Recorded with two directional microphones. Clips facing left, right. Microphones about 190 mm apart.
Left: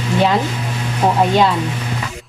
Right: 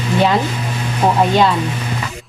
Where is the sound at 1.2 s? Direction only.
10° left (ahead or behind).